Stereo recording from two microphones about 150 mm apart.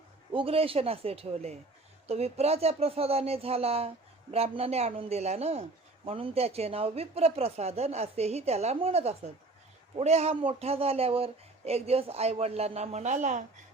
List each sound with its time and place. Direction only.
0.3 s speech: 40° right (ahead or behind); by 13.4 s 55° right (ahead or behind)